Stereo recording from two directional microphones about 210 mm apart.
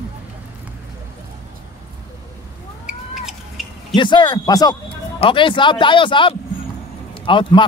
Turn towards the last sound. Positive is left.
turn(degrees=25)  # may be behind; listen again after turning